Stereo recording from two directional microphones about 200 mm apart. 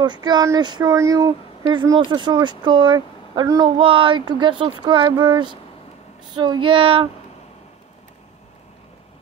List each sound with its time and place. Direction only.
0.0 s speech: 20° right (ahead or behind)